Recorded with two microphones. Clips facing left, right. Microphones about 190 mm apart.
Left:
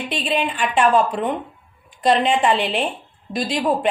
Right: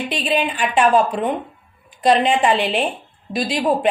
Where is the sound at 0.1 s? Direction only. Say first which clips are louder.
Even; 5° right (ahead or behind).